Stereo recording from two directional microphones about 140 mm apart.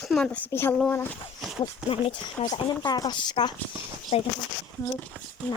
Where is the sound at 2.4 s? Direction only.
30° left (ahead or behind).